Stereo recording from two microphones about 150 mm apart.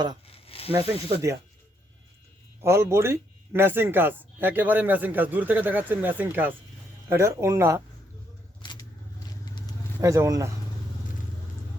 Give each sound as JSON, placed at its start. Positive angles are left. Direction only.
{"t": 0.3, "sound": "a sound", "side_deg": 40}
{"t": 0.7, "sound": "speech", "side_deg": -15}
{"t": 2.6, "sound": "speech", "side_deg": -15}
{"t": 8.6, "sound": "vehicle", "side_deg": 30}
{"t": 10.0, "sound": "speech", "side_deg": -20}